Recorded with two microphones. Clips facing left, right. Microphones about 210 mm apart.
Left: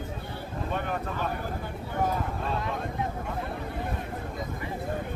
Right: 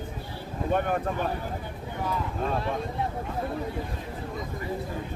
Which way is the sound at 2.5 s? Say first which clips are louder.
Right 2 dB; 30° right (ahead or behind).